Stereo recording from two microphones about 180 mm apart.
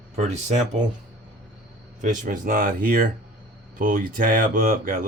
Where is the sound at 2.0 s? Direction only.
45° right (ahead or behind).